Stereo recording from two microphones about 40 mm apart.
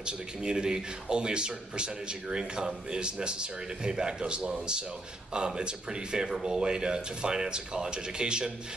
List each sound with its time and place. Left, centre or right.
0.0 s speech: right